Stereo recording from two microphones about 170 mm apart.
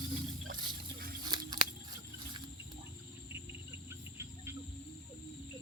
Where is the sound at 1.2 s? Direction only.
25° right (ahead or behind).